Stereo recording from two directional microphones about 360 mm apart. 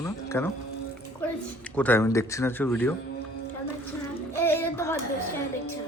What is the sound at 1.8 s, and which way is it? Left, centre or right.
Speech, centre.